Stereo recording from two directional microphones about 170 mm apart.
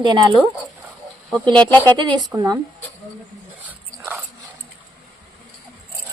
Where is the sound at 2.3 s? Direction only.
20° right (ahead or behind).